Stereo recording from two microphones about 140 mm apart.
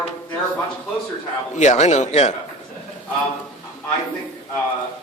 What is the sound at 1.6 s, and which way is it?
Speech, 55° left (ahead or behind).